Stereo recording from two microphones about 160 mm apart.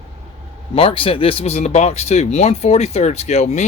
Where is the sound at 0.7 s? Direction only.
35° left (ahead or behind).